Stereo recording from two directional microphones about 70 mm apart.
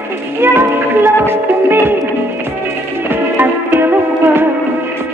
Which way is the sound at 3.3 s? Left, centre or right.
Right.